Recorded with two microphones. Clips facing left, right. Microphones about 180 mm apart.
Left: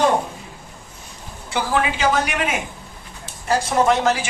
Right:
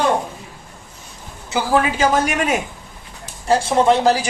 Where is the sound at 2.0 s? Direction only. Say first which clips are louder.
Right 3 dB; 45° right (ahead or behind).